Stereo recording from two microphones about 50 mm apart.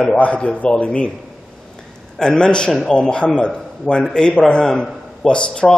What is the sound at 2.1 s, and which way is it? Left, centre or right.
A man's voice, centre.